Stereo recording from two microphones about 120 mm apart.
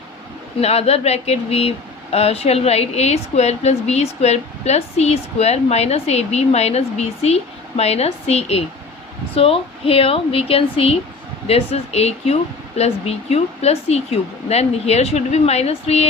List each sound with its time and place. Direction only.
0.6 s a woman's voice: 60° left (ahead or behind)